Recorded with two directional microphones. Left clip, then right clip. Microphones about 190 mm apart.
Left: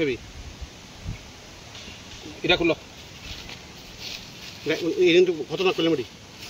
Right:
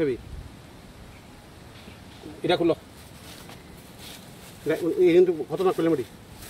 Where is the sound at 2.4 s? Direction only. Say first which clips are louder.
Left 1 dB; centre (ahead or behind).